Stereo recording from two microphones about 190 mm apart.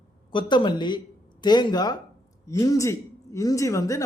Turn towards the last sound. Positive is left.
turn(degrees=15)  # may be behind; listen again after turning